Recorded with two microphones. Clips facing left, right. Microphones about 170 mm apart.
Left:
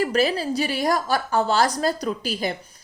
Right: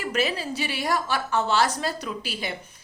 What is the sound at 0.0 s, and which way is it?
Speech, 35° left (ahead or behind).